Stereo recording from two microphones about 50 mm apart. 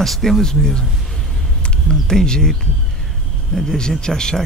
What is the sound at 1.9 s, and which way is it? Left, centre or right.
Speech, centre.